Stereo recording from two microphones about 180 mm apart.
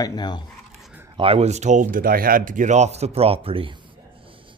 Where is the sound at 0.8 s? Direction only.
10° right (ahead or behind).